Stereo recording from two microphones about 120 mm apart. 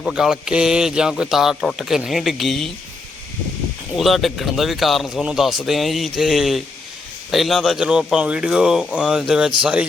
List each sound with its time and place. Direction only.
0.1 s speech: 5° right (ahead or behind)
3.9 s speech: centre (ahead or behind)